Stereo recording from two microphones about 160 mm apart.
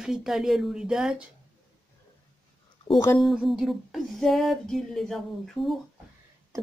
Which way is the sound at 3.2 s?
Centre (ahead or behind).